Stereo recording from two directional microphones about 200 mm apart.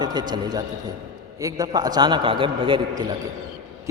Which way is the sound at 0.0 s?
20° right (ahead or behind).